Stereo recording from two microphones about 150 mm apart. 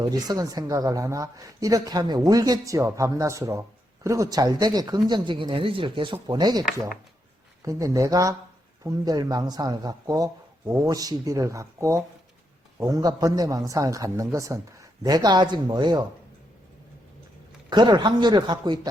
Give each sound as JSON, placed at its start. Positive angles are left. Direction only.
{"t": 0.0, "sound": "speech", "side_deg": -25}
{"t": 17.7, "sound": "speech", "side_deg": -30}